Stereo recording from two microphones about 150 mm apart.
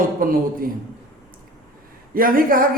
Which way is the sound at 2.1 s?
70° right (ahead or behind).